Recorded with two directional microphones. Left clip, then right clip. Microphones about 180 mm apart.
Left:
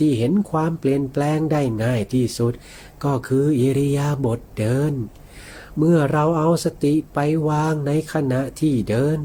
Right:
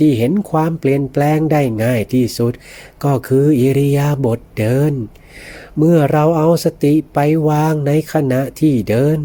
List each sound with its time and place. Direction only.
0.0 s speech: 40° right (ahead or behind)